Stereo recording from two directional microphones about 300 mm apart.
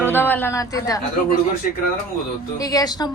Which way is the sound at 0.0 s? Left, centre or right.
Centre.